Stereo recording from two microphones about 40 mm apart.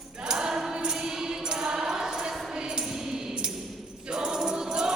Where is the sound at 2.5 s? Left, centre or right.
Centre.